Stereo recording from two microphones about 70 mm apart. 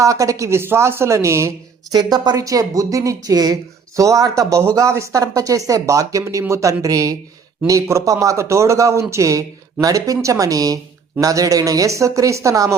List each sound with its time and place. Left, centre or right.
0.0 s speech: right
1.9 s speech: right